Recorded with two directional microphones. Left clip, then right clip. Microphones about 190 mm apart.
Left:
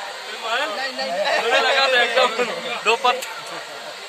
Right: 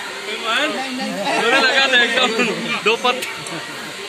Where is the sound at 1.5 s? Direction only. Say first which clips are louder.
Right 3 dB; 60° left (ahead or behind).